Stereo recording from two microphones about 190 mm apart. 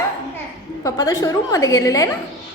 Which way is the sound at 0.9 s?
20° left (ahead or behind).